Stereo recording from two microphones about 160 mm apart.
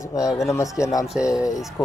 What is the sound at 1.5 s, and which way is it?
Speech, centre (ahead or behind).